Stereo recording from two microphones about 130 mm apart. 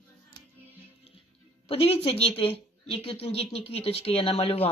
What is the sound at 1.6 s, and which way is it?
A woman's voice, 45° left (ahead or behind).